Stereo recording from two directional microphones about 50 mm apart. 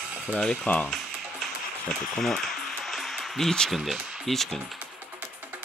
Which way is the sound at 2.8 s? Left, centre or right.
Centre.